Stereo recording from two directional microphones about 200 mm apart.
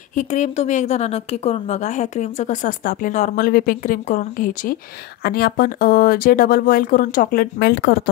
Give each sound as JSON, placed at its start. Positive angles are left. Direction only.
{"t": 0.1, "sound": "a woman's voice", "side_deg": 35}